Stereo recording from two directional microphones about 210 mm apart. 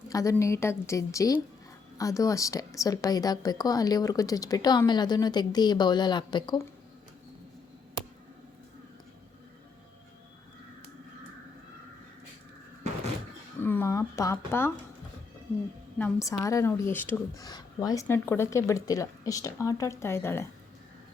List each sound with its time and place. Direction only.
0.1 s a woman's voice: 15° left (ahead or behind)
13.6 s a sound: 10° left (ahead or behind)
16.0 s a woman's voice: 10° left (ahead or behind)